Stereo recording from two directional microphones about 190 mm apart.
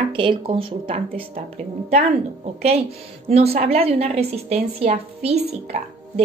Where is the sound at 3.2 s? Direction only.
30° right (ahead or behind).